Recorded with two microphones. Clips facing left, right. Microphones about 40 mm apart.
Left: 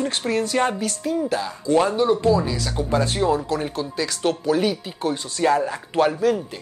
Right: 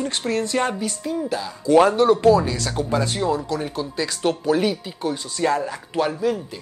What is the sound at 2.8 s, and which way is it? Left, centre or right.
Speech, centre.